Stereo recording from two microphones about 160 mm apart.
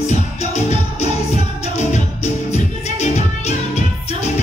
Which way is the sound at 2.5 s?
45° left (ahead or behind).